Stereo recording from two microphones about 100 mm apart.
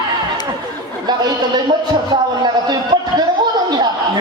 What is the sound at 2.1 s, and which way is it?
Speech, 45° right (ahead or behind).